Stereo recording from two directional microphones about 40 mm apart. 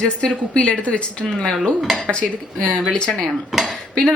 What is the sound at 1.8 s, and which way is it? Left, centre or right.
Speech, centre.